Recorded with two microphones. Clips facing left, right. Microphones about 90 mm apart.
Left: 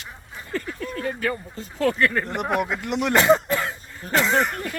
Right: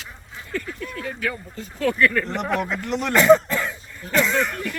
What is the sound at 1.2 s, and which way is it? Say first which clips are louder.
Speech: left 2 dB; 35° left (ahead or behind).